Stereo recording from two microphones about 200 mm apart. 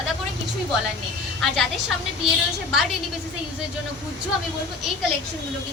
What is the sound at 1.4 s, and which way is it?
Speech, centre (ahead or behind).